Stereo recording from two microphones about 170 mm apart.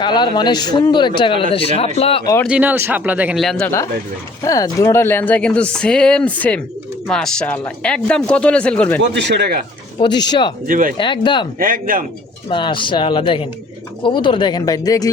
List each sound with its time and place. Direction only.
0.0 s a man's voice: 25° left (ahead or behind)
2.5 s speech: 10° right (ahead or behind)
4.4 s speech: 20° left (ahead or behind)
9.1 s speech: 85° right; by 9.6 s 70° right (ahead or behind)
10.0 s a man's voice: 25° left (ahead or behind)
10.7 s speech: 50° right (ahead or behind)
10.9 s a man's voice: 30° left (ahead or behind)
11.6 s a man's voice: 55° right (ahead or behind)
12.5 s a man's voice: 30° left (ahead or behind)